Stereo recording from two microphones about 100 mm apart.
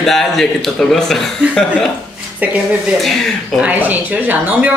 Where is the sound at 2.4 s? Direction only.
15° right (ahead or behind).